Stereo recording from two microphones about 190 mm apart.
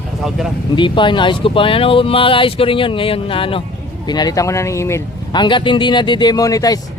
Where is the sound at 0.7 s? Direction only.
25° left (ahead or behind).